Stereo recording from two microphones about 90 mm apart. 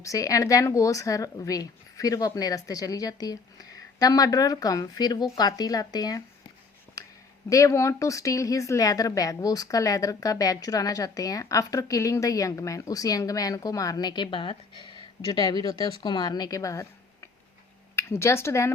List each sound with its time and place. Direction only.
0.0 s a woman's voice: 40° left (ahead or behind)
7.0 s a sound: 40° left (ahead or behind)
7.5 s a woman's voice: 35° left (ahead or behind)
17.9 s speech: 30° left (ahead or behind)